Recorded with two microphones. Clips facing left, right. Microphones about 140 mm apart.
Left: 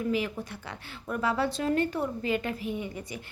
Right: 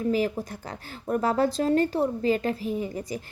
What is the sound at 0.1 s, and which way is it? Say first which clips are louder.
A woman's voice: right 4 dB; 40° right (ahead or behind).